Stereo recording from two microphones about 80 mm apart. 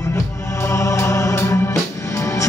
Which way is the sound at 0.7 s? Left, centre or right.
Left.